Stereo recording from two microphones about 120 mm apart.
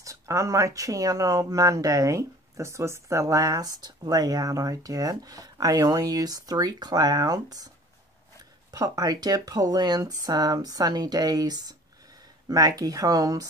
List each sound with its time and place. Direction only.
0.0 s speech: 25° right (ahead or behind)
8.7 s speech: 30° right (ahead or behind)